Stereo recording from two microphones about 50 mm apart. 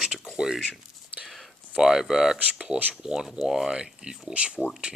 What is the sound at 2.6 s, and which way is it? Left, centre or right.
Speech, right.